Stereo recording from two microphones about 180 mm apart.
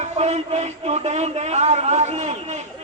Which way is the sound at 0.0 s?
35° right (ahead or behind).